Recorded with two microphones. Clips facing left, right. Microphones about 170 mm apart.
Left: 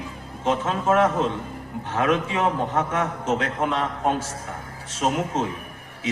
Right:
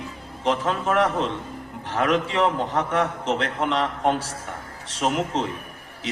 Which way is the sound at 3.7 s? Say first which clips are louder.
Right 1 dB; 80° right.